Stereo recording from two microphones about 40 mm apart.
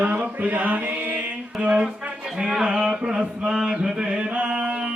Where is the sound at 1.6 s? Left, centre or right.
Right.